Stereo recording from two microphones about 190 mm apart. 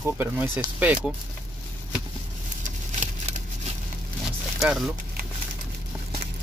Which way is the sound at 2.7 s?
40° right (ahead or behind).